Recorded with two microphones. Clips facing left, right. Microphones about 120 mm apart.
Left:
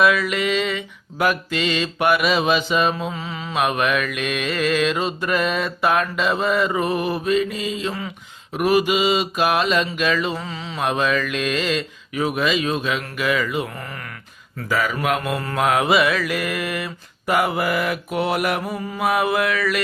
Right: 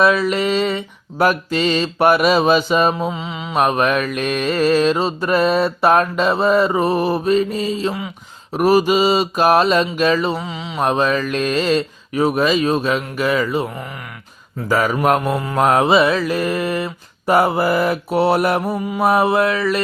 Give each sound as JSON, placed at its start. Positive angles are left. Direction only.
{"t": 0.0, "sound": "mantra", "side_deg": -30}
{"t": 3.1, "sound": "mantra", "side_deg": -20}
{"t": 3.5, "sound": "mantra", "side_deg": -40}
{"t": 10.3, "sound": "mantra", "side_deg": -15}
{"t": 10.8, "sound": "mantra", "side_deg": -35}
{"t": 14.7, "sound": "speech", "side_deg": -40}
{"t": 15.5, "sound": "mantra", "side_deg": -35}